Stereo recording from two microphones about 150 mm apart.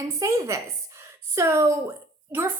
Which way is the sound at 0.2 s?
20° right (ahead or behind).